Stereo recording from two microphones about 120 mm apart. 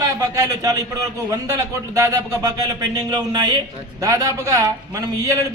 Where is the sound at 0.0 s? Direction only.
30° right (ahead or behind).